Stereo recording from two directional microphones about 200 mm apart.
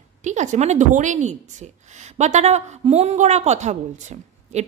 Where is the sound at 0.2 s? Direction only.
35° right (ahead or behind).